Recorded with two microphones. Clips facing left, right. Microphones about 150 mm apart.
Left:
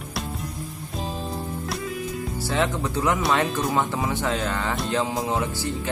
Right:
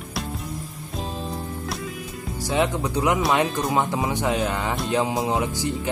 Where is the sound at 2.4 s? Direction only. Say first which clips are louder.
Right 3 dB; 15° right (ahead or behind).